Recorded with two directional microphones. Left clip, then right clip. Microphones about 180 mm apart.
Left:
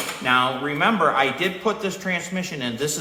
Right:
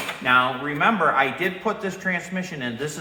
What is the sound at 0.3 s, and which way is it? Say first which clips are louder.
A man's voice: right 1 dB; 20° left (ahead or behind).